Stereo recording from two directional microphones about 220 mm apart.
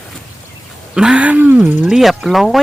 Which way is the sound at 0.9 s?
5° right (ahead or behind).